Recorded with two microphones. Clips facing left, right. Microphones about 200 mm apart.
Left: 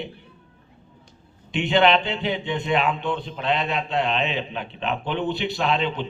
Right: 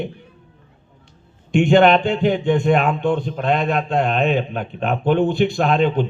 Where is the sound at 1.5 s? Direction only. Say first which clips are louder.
Right 6 dB; 45° right (ahead or behind).